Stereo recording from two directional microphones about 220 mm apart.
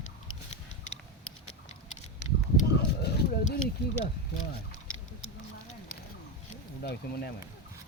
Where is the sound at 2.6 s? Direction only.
40° left (ahead or behind).